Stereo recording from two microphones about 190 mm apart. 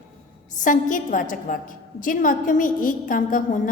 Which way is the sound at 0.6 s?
45° left (ahead or behind).